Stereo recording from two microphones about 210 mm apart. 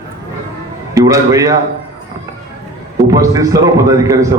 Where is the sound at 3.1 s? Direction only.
15° right (ahead or behind).